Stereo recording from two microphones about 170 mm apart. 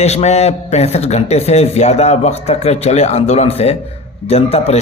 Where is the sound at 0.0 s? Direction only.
40° left (ahead or behind).